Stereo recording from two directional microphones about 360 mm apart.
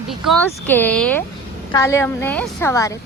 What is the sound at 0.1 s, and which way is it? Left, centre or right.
A woman's voice, centre.